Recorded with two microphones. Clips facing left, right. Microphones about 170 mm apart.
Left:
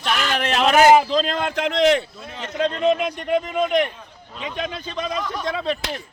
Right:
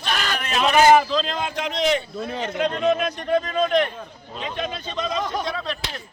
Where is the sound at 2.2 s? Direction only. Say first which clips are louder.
Right 6 dB; 35° right (ahead or behind).